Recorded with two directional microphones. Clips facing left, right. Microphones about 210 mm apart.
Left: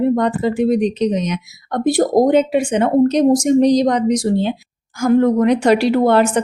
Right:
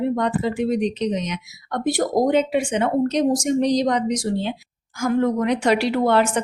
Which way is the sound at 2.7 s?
50° left (ahead or behind).